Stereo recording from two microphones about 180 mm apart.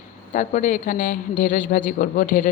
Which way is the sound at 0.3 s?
45° left (ahead or behind).